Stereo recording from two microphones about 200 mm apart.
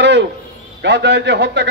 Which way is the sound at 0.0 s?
60° right (ahead or behind).